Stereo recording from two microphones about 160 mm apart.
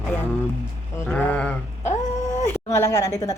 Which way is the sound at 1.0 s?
10° left (ahead or behind).